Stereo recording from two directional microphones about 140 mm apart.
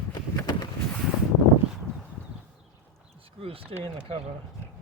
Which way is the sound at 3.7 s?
45° right (ahead or behind).